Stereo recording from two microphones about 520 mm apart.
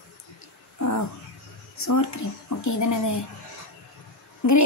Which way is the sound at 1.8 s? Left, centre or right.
Left.